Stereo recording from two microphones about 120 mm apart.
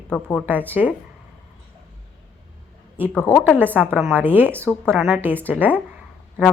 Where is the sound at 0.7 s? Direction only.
10° right (ahead or behind).